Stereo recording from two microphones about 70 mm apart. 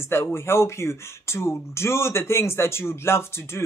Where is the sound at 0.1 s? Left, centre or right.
Left.